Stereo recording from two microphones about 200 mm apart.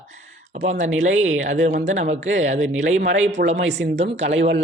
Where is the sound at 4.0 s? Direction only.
30° right (ahead or behind).